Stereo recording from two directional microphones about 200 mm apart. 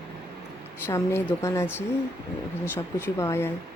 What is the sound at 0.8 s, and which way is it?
Speech, 15° left (ahead or behind).